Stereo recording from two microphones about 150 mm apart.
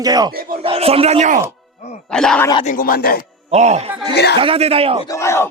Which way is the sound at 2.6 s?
70° left (ahead or behind).